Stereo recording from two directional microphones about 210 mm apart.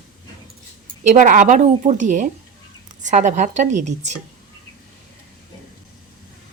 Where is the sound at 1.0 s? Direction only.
40° right (ahead or behind).